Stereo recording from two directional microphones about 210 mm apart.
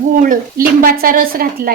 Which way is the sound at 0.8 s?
45° right (ahead or behind).